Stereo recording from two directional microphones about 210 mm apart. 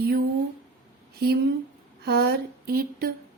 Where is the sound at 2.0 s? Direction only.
50° right (ahead or behind).